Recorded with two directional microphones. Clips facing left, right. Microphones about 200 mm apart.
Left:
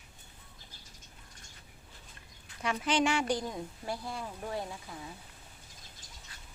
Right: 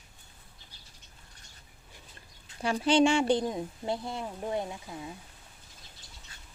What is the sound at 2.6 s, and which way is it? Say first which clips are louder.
A woman's voice: right 6 dB; 30° right (ahead or behind).